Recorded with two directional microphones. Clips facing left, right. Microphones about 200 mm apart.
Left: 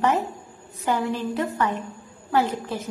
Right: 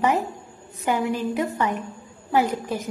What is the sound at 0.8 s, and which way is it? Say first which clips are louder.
A woman's voice: right 1 dB; 15° right (ahead or behind).